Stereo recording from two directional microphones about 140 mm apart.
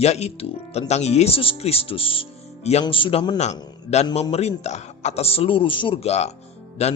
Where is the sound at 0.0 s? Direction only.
50° left (ahead or behind).